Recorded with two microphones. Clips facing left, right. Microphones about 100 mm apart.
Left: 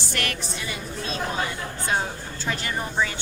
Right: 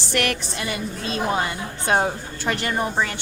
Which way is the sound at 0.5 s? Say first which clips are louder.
Right 4 dB; 75° right (ahead or behind).